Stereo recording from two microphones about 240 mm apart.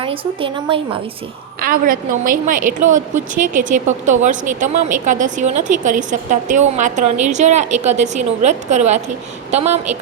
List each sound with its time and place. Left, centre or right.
0.0 s a woman's voice: right
1.6 s a woman's voice: right